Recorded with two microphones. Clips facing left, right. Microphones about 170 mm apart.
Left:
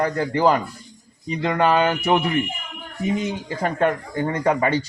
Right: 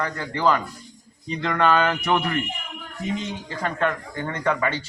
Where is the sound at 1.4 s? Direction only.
30° left (ahead or behind).